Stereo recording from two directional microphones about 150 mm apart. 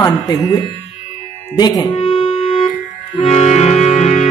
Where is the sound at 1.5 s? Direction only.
25° left (ahead or behind).